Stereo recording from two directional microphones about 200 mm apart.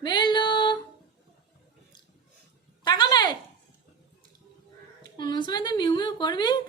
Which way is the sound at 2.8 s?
20° left (ahead or behind).